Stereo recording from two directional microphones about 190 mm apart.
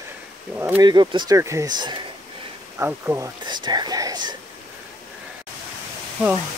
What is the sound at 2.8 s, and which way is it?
Speech, 10° right (ahead or behind).